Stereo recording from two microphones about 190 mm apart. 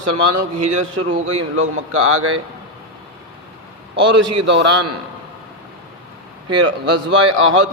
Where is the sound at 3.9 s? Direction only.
70° right (ahead or behind).